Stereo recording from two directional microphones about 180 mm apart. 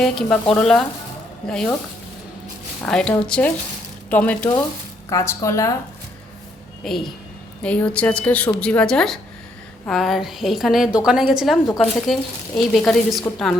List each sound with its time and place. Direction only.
0.0 s a woman's voice: 5° left (ahead or behind)
2.8 s a woman's voice: 5° left (ahead or behind)
6.8 s a woman's voice: centre (ahead or behind)